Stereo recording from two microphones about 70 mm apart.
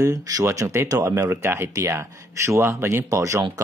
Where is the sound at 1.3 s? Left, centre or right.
Right.